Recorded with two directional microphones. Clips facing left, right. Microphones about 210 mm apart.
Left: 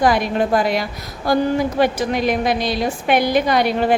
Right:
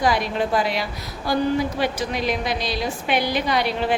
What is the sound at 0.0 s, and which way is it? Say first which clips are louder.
A woman's voice: left 4 dB; 50° left (ahead or behind).